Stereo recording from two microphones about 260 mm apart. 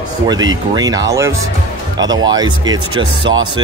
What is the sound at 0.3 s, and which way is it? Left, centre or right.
Speech, centre.